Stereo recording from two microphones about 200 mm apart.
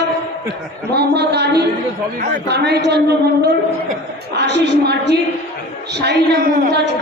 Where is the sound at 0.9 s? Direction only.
55° right (ahead or behind).